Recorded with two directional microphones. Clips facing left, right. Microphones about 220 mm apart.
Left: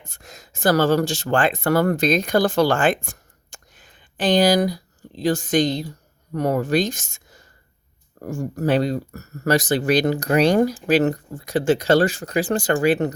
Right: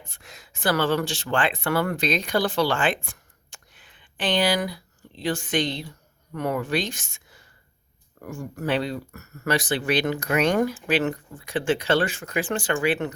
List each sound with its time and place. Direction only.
0.0 s speech: 45° left (ahead or behind)